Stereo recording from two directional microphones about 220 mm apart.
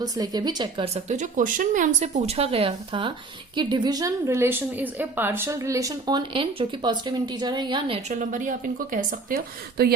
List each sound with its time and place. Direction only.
0.0 s speech: 20° right (ahead or behind)
8.1 s a woman's voice: 40° right (ahead or behind)